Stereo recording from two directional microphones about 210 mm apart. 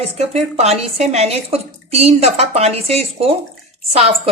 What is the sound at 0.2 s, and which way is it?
A woman's voice, 30° right (ahead or behind).